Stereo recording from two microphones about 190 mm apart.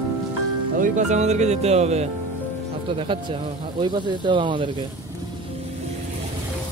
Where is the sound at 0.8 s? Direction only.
40° right (ahead or behind).